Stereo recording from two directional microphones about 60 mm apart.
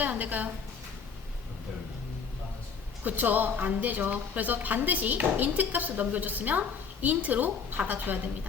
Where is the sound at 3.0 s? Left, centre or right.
Right.